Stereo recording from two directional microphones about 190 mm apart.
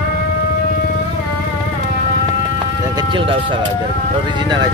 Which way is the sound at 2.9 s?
25° right (ahead or behind).